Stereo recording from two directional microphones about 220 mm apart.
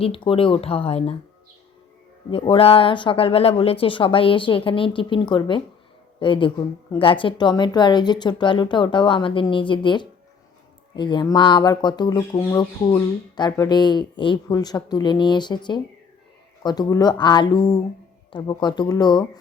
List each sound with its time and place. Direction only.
0.0 s speech: 25° left (ahead or behind)
2.3 s speech: 25° left (ahead or behind)